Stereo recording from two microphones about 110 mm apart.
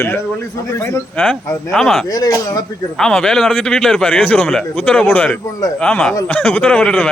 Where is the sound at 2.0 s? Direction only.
35° left (ahead or behind).